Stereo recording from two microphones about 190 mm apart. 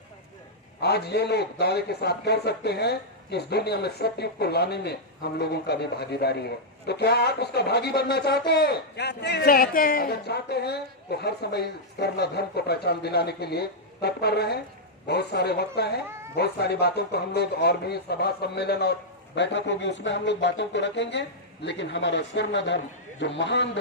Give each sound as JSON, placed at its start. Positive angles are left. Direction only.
{"t": 0.8, "sound": "a man's voice", "side_deg": 60}